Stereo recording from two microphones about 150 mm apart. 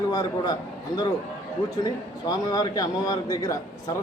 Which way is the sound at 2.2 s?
25° left (ahead or behind).